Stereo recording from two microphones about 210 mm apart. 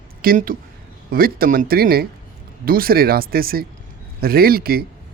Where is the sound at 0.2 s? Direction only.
45° right (ahead or behind).